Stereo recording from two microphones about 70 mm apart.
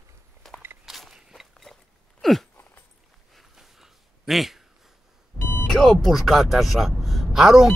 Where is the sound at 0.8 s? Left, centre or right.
Centre.